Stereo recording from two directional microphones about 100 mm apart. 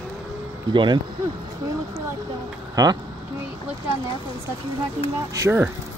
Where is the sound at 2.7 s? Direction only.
35° right (ahead or behind).